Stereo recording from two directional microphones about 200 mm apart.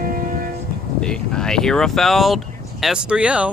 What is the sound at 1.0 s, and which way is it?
Speech, 5° left (ahead or behind).